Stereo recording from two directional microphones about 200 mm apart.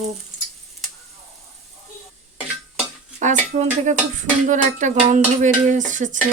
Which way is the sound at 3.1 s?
35° right (ahead or behind).